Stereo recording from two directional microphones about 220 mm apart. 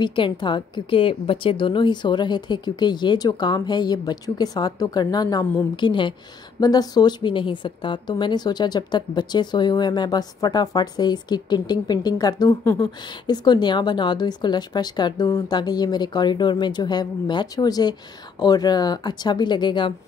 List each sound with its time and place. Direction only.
0.0 s a woman's voice: 20° left (ahead or behind)